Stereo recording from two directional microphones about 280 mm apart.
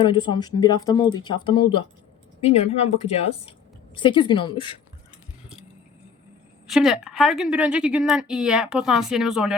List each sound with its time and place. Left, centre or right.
0.0 s speech: centre
6.7 s a woman's voice: centre